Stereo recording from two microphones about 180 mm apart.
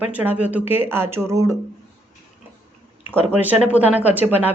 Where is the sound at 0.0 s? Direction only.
10° right (ahead or behind).